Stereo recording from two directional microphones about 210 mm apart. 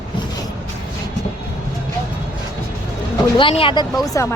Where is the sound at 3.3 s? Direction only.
25° left (ahead or behind).